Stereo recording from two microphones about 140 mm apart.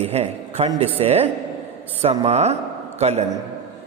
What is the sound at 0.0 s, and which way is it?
A man's voice, 50° right (ahead or behind).